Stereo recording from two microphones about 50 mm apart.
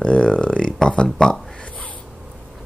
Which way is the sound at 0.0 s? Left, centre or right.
Left.